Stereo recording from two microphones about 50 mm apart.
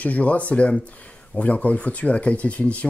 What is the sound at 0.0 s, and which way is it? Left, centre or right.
Speech, left.